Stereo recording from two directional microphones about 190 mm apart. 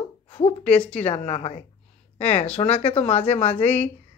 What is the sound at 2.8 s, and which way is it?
Speech, 10° left (ahead or behind).